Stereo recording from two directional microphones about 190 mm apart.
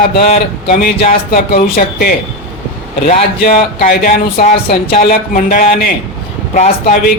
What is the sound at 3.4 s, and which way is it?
Speech, 50° left (ahead or behind).